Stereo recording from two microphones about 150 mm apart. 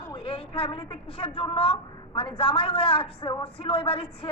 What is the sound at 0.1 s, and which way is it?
A woman's voice, 35° left (ahead or behind).